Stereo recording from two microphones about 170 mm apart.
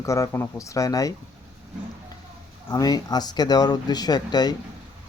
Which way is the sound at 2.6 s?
20° left (ahead or behind).